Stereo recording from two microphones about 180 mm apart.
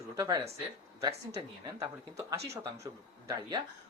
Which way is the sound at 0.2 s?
20° right (ahead or behind).